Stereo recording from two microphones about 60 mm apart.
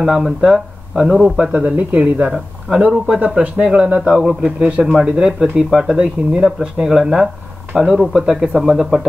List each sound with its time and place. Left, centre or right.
0.0 s speech: centre
1.4 s speech: right; by 9.0 s centre